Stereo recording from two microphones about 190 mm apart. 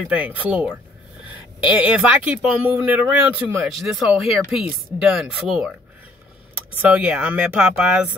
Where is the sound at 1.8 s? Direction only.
5° right (ahead or behind).